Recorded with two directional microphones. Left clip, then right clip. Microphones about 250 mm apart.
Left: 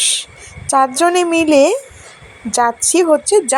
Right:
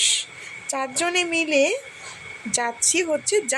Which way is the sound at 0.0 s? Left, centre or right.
Left.